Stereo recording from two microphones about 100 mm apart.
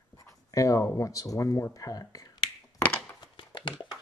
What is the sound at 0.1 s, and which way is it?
Speech, 35° left (ahead or behind).